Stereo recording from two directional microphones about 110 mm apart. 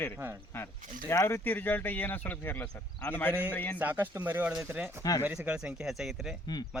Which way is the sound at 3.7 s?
15° right (ahead or behind).